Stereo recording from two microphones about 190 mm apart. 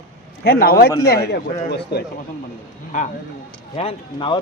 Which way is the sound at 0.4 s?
55° left (ahead or behind).